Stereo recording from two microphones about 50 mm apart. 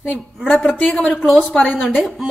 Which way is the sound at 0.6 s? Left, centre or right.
Left.